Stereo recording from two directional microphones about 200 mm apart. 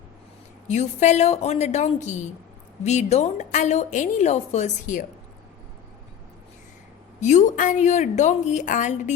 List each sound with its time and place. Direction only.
0.7 s a woman's voice: 35° left (ahead or behind)
7.2 s a woman's voice: 35° left (ahead or behind)